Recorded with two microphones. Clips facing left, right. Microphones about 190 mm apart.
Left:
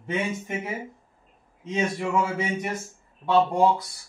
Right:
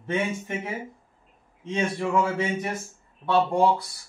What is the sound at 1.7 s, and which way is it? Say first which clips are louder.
Speech: even; 10° left (ahead or behind).